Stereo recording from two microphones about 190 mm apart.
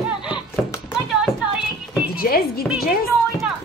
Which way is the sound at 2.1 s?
50° left (ahead or behind).